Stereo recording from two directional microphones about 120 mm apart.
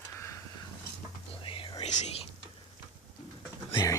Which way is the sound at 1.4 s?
45° left (ahead or behind).